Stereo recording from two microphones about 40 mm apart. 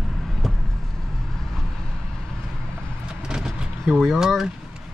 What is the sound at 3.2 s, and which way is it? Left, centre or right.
Vehicle, centre.